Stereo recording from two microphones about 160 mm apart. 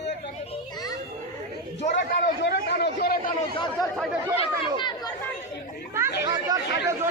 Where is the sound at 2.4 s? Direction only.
90° left.